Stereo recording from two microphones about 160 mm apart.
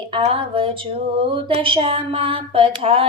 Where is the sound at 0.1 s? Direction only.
35° right (ahead or behind).